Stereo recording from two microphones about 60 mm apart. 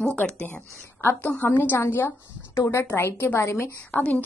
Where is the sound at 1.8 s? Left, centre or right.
Left.